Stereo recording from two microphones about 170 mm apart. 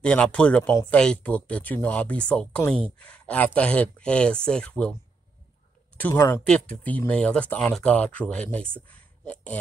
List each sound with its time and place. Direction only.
0.0 s speech: 5° left (ahead or behind)
5.9 s speech: 15° left (ahead or behind)
6.4 s speech: 5° left (ahead or behind)
8.8 s a sound: 10° left (ahead or behind)